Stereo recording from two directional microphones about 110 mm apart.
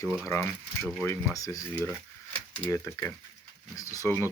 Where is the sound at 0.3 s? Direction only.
25° left (ahead or behind).